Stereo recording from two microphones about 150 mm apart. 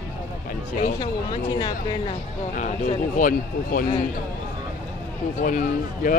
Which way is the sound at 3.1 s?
70° left (ahead or behind).